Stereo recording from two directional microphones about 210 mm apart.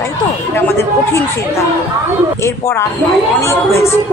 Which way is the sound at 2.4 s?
10° left (ahead or behind).